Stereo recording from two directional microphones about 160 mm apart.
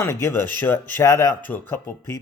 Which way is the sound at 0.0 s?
20° left (ahead or behind).